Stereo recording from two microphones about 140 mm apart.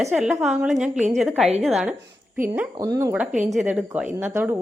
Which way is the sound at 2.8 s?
25° right (ahead or behind).